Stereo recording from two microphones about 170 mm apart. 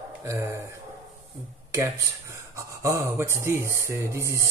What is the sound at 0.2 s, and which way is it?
Speech, 15° right (ahead or behind).